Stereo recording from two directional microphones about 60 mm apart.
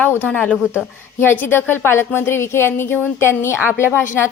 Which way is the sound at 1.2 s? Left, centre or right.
Left.